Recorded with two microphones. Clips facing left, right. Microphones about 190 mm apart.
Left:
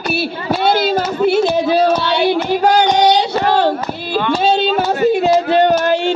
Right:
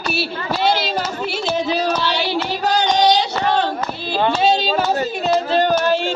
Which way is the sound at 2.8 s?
55° left (ahead or behind).